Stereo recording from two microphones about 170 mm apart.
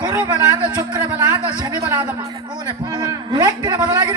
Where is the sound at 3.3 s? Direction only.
25° right (ahead or behind).